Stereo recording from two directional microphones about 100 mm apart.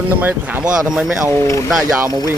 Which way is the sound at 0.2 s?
20° right (ahead or behind).